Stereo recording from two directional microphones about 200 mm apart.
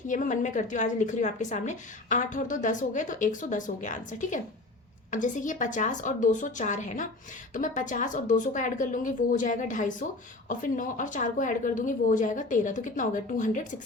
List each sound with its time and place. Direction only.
0.1 s a woman's voice: 40° left (ahead or behind)